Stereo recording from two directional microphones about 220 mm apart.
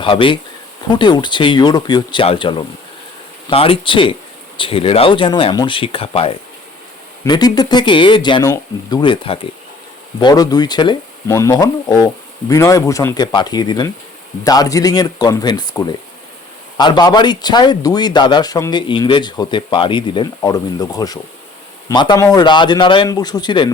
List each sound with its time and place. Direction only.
0.0 s a man's voice: 25° left (ahead or behind)